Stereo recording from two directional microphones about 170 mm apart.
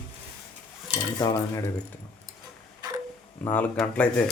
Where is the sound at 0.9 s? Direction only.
25° left (ahead or behind).